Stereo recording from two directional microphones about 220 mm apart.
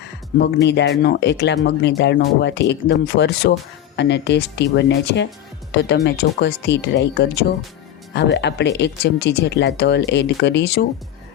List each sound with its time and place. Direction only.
0.3 s speech: 50° left (ahead or behind)